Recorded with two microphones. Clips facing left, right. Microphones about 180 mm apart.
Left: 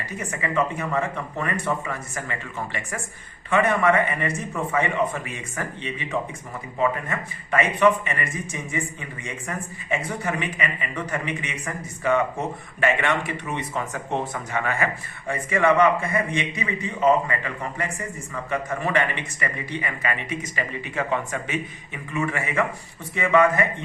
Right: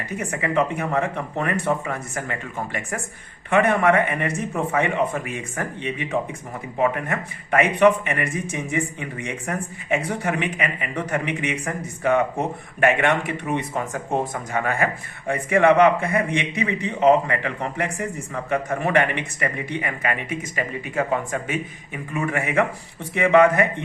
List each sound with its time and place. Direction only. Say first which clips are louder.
0.0 s speech: right 3 dB; 60° right (ahead or behind)
15.3 s speech: right 4 dB; 60° right (ahead or behind)